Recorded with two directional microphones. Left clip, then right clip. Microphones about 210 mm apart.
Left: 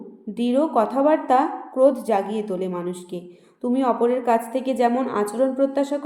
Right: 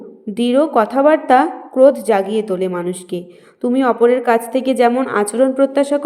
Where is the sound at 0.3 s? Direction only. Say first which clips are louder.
Right 6 dB; 25° right (ahead or behind).